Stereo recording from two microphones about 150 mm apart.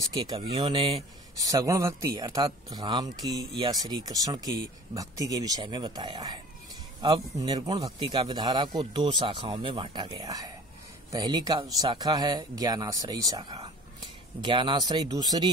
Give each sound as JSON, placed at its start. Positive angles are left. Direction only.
{"t": 0.1, "sound": "speech", "side_deg": -25}
{"t": 1.4, "sound": "speech", "side_deg": -25}